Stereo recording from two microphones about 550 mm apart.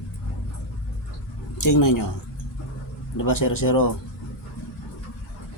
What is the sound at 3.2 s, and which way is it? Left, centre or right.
Speech, left.